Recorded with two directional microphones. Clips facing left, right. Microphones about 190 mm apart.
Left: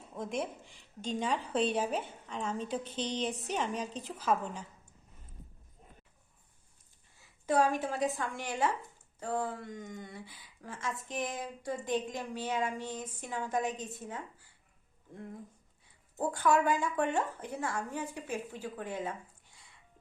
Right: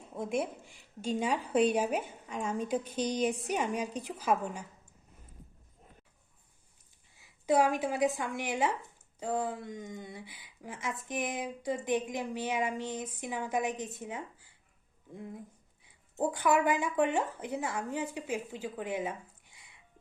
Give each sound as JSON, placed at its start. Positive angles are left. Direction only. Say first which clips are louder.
{"t": 0.2, "sound": "a woman's voice", "louder": "right 3 dB", "side_deg": -10}
{"t": 7.2, "sound": "a woman's voice", "louder": "right 2 dB", "side_deg": -15}